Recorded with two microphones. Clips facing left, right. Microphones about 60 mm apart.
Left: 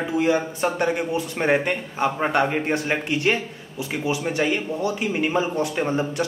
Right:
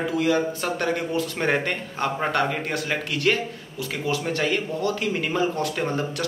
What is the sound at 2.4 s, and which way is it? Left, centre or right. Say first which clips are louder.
A man's voice: left 3 dB; left.